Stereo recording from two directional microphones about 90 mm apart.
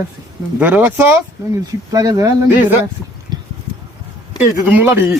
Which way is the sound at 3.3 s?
55° right (ahead or behind).